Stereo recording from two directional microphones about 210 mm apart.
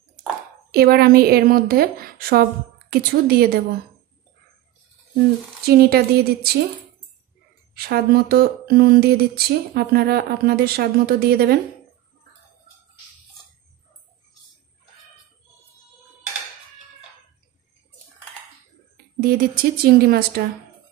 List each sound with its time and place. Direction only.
0.7 s speech: 50° right (ahead or behind)
5.7 s speech: 50° right (ahead or behind)
7.7 s speech: 50° right (ahead or behind)
19.1 s speech: 45° right (ahead or behind)